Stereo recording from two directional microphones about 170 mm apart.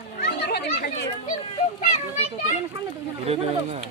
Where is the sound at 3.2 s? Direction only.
40° right (ahead or behind).